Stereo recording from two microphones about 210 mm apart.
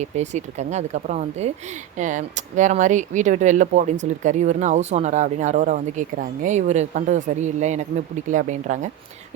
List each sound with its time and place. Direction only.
0.0 s speech: 35° right (ahead or behind)